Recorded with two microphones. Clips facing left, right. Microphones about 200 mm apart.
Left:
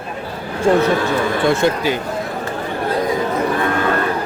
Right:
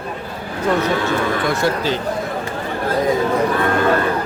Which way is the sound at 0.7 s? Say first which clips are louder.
Left 4 dB; 30° left (ahead or behind).